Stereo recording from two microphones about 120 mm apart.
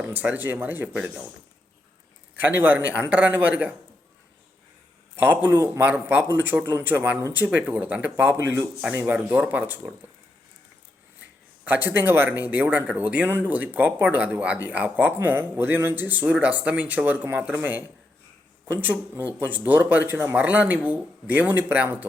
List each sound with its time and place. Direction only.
0.0 s speech: 15° right (ahead or behind)
2.3 s speech: 15° right (ahead or behind)
5.1 s speech: 15° right (ahead or behind)
11.6 s speech: 15° right (ahead or behind)